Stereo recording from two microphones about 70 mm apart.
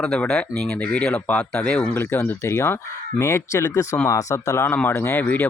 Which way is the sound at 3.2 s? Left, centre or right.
Left.